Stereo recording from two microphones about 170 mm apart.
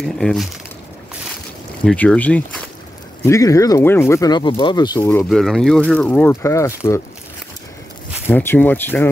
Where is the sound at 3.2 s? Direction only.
20° left (ahead or behind).